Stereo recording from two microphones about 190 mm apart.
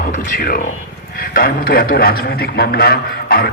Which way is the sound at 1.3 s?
50° left (ahead or behind).